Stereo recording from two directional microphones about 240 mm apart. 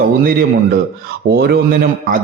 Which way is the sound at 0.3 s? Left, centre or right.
Right.